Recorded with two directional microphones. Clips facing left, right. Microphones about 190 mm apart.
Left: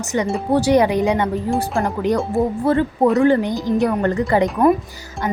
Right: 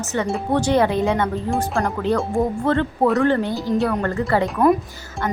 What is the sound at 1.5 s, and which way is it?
Speech, centre (ahead or behind).